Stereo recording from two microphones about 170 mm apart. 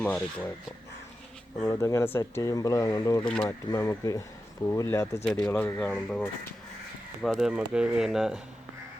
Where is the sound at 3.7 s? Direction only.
20° left (ahead or behind); by 8.4 s centre (ahead or behind).